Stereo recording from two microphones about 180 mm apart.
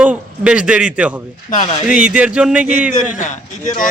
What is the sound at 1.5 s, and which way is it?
Speech, 40° left (ahead or behind).